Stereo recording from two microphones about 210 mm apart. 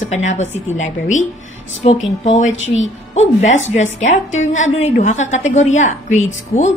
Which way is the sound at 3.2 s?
35° left (ahead or behind).